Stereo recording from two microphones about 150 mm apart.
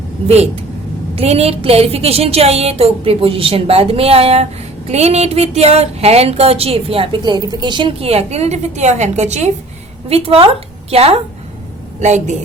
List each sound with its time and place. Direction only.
0.3 s a woman's voice: 45° right (ahead or behind)